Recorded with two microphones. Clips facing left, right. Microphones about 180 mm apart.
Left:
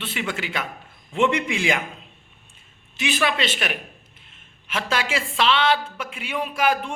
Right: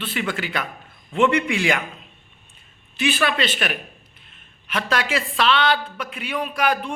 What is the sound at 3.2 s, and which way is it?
A man's voice, 20° left (ahead or behind).